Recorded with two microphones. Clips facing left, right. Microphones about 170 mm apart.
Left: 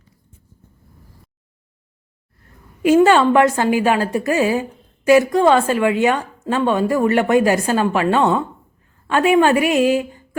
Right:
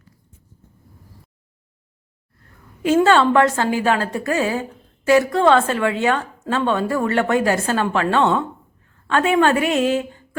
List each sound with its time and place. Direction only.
2.8 s a woman's voice: 15° left (ahead or behind)